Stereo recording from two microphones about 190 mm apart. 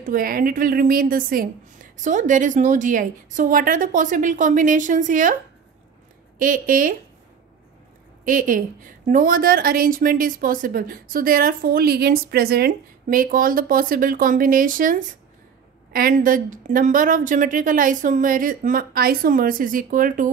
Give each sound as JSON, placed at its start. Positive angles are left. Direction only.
{"t": 0.0, "sound": "a woman's voice", "side_deg": -50}
{"t": 6.3, "sound": "a woman's voice", "side_deg": -45}
{"t": 8.3, "sound": "a woman's voice", "side_deg": -45}